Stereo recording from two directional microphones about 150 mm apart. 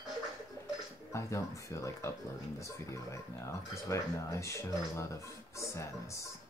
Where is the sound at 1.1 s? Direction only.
20° left (ahead or behind).